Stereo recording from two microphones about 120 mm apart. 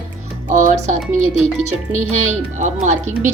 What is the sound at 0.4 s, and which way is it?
Music, 85° right.